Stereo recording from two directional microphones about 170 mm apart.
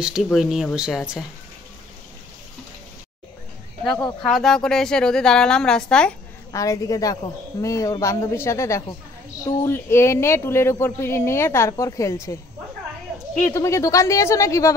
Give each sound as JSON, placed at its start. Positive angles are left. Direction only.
{"t": 0.0, "sound": "a woman's voice", "side_deg": -5}
{"t": 4.2, "sound": "a woman's voice", "side_deg": 0}
{"t": 6.5, "sound": "a woman's voice", "side_deg": 20}
{"t": 13.5, "sound": "speech", "side_deg": 15}